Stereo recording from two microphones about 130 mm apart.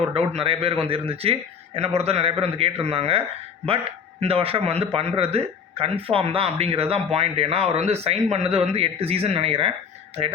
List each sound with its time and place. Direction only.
0.1 s a man's voice: 45° right (ahead or behind)